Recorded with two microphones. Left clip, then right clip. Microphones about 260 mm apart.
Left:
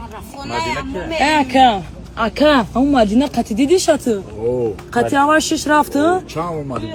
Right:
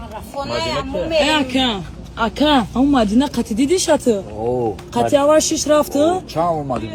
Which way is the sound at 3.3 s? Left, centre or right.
Right.